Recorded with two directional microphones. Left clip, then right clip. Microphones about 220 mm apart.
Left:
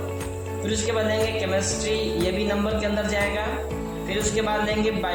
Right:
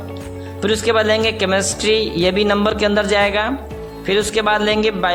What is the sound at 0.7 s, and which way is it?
Speech, 45° right (ahead or behind).